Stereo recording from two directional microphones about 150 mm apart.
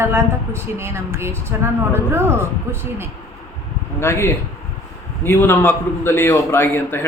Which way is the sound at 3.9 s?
15° left (ahead or behind).